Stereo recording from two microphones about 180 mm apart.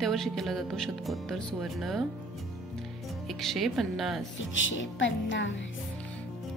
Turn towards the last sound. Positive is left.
turn(degrees=90)